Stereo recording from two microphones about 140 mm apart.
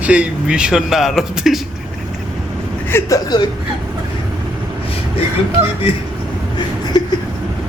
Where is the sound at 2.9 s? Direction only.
25° left (ahead or behind).